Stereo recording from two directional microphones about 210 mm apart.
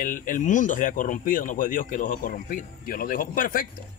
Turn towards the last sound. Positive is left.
turn(degrees=40)  # may be behind; listen again after turning